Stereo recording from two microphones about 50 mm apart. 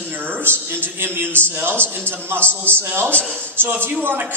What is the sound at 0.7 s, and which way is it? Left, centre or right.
A man's voice, right.